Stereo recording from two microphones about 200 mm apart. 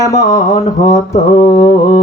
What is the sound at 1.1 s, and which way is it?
Mantra, 40° left (ahead or behind).